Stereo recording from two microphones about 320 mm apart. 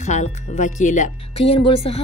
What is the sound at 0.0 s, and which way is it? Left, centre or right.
Speech, left.